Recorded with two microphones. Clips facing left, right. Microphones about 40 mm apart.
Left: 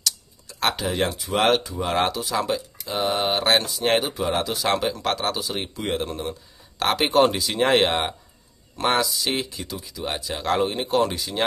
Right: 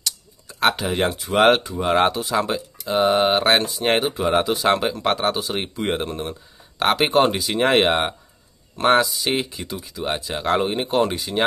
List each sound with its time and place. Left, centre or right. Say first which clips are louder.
0.0 s a sound: left 1 dB; centre
1.6 s speech: right 5 dB; centre
9.0 s speech: right 2 dB; centre